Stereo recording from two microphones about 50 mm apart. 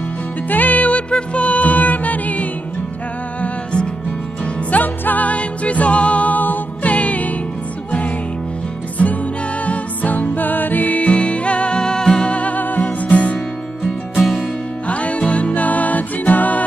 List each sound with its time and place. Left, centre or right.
0.5 s music: left
4.6 s music: left
8.9 s music: left
14.1 s music: centre
14.9 s music: left